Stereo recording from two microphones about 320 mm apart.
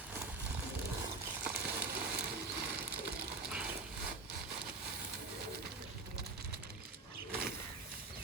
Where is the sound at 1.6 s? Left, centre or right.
Right.